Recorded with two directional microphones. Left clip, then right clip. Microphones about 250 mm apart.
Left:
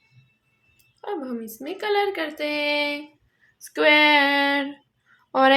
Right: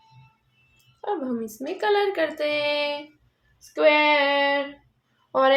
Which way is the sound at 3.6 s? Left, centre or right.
Left.